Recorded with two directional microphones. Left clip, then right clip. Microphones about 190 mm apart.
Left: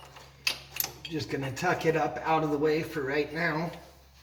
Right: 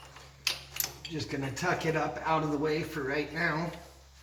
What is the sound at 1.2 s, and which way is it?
A man's voice, 35° right (ahead or behind).